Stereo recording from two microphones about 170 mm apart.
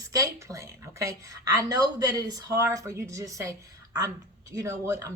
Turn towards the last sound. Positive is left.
turn(degrees=-20)  # may be behind; listen again after turning